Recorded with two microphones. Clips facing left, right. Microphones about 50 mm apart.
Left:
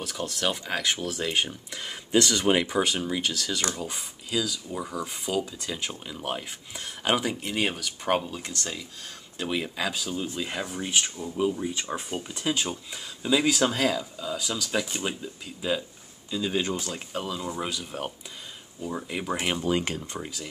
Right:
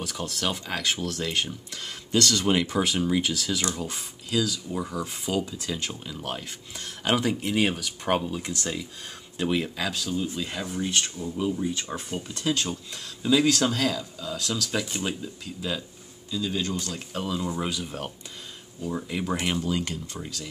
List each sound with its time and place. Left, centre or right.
0.0 s speech: centre
2.8 s speech: centre
16.3 s speech: left
17.1 s speech: centre
19.6 s speech: left